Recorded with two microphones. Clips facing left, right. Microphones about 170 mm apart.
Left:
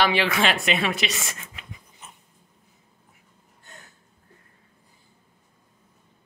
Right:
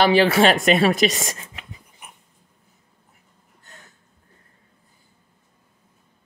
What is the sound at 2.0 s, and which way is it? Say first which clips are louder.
Dog: right 1 dB; 15° right (ahead or behind).